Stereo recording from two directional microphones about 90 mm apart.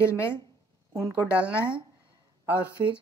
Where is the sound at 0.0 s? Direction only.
30° left (ahead or behind).